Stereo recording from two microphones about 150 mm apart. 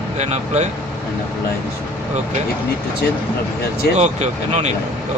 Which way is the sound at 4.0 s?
50° right (ahead or behind).